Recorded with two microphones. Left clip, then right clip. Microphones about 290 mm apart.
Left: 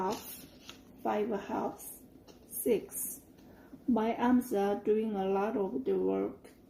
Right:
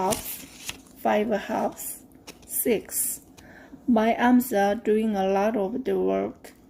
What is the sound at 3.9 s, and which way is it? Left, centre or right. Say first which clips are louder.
A woman's voice: right 9 dB; right.